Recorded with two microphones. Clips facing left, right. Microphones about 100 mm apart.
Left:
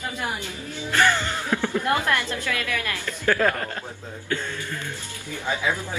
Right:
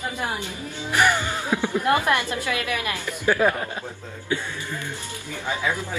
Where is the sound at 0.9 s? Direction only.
15° right (ahead or behind).